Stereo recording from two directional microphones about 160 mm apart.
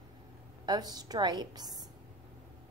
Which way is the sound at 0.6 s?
25° right (ahead or behind).